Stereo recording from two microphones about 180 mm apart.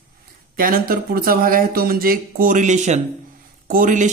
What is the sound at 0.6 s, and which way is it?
A man's voice, 55° right (ahead or behind).